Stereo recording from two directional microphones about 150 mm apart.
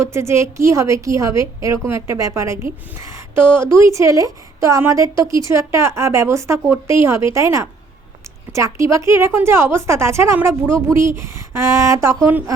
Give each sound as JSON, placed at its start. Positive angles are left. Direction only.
{"t": 0.0, "sound": "speech", "side_deg": -20}